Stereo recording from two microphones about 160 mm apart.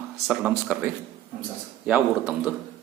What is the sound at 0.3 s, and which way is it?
Speech, 10° right (ahead or behind).